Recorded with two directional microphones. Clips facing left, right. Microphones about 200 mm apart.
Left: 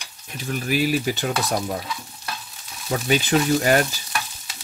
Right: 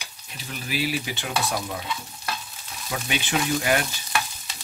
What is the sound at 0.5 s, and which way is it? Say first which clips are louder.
Stir: left 6 dB; 50° left (ahead or behind).